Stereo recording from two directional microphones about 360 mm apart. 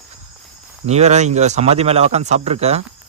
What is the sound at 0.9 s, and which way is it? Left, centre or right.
Speech, centre.